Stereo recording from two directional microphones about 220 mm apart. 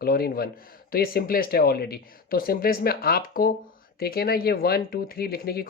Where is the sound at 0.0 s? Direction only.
45° left (ahead or behind).